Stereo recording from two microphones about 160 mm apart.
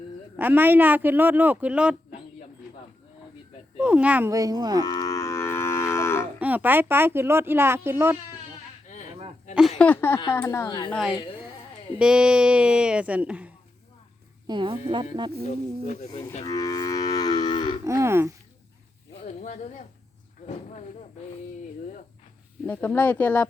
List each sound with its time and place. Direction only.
0.3 s speech: 10° right (ahead or behind)
3.8 s speech: 10° right (ahead or behind)
4.3 s speech: 25° right (ahead or behind)
4.8 s moo: 25° left (ahead or behind)
6.4 s speech: 10° right (ahead or behind)
9.6 s speech: centre (ahead or behind); by 10.9 s 25° left (ahead or behind)
11.9 s speech: 5° right (ahead or behind)
14.4 s speech: 30° right (ahead or behind)
15.4 s speech: 45° left (ahead or behind)
16.4 s moo: 20° left (ahead or behind)
17.8 s speech: 15° right (ahead or behind)
19.2 s speech: 50° left (ahead or behind)
22.6 s speech: 10° left (ahead or behind)